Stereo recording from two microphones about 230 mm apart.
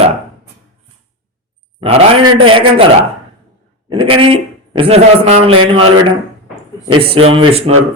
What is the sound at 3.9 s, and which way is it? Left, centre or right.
A man's voice, right.